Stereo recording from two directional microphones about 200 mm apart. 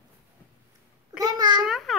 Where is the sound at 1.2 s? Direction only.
20° right (ahead or behind).